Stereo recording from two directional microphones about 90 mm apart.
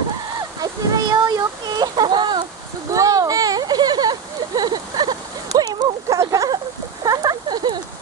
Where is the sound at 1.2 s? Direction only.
45° right (ahead or behind).